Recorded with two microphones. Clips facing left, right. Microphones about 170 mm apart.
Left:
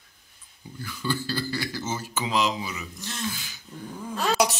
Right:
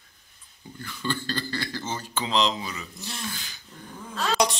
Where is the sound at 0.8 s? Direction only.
10° left (ahead or behind).